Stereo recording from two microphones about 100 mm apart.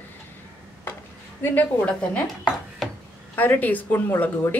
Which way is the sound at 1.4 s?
15° left (ahead or behind).